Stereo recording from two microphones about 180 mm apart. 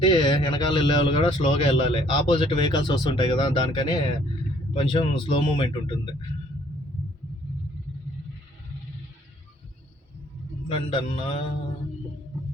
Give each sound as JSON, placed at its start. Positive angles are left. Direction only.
{"t": 0.0, "sound": "speech", "side_deg": 25}
{"t": 10.7, "sound": "speech", "side_deg": 30}